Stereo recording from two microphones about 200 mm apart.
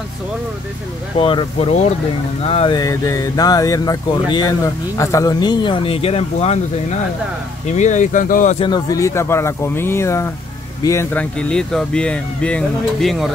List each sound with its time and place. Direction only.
1.2 s speech: 25° left (ahead or behind)
7.7 s speech: 35° left (ahead or behind)
8.5 s speech: 20° left (ahead or behind); by 13.3 s centre (ahead or behind)